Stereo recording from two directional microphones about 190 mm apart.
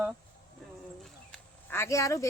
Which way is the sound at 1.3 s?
15° left (ahead or behind).